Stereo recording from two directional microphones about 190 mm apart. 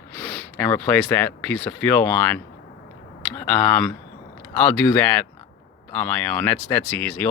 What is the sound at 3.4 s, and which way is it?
Speech, 10° left (ahead or behind).